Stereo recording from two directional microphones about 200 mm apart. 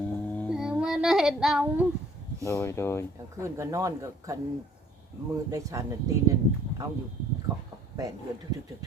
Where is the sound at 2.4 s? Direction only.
15° left (ahead or behind).